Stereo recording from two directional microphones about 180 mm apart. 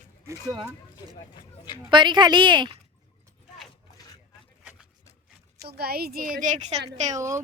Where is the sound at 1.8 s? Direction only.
25° right (ahead or behind).